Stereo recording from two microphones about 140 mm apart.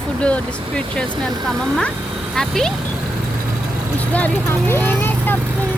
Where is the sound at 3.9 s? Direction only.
10° left (ahead or behind).